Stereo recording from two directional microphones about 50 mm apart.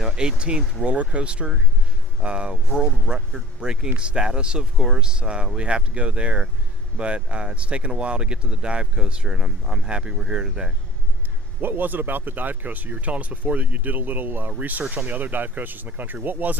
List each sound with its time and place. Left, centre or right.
0.0 s speech: centre
11.6 s speech: right